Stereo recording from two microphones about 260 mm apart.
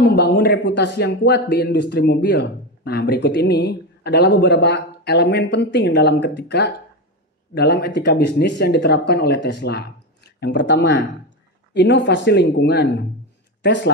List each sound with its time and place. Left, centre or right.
0.0 s speech: left